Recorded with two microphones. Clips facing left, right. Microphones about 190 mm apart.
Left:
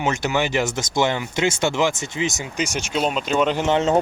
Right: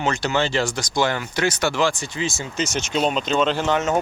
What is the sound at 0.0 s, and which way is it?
Speech, 15° left (ahead or behind).